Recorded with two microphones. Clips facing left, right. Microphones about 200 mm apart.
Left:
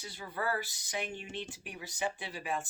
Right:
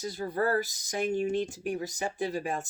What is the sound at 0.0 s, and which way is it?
Speech, 40° right (ahead or behind).